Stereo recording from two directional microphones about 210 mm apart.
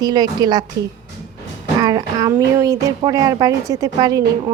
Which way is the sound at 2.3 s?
15° right (ahead or behind).